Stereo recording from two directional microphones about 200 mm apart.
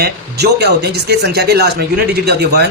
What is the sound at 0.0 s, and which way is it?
Speech, 55° right (ahead or behind).